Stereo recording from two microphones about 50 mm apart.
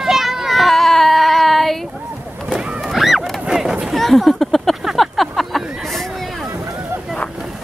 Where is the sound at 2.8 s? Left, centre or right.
Centre.